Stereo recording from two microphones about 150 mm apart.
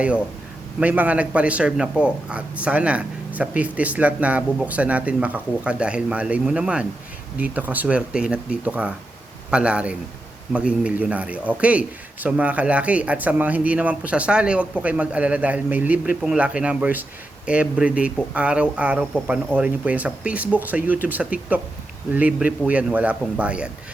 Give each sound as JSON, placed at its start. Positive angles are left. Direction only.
{"t": 0.0, "sound": "a man's voice", "side_deg": -10}